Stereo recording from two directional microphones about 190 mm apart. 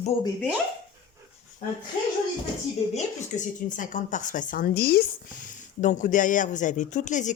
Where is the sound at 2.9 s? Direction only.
40° left (ahead or behind).